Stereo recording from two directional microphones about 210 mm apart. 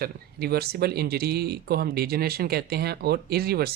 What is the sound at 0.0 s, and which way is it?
Speech, 50° right (ahead or behind).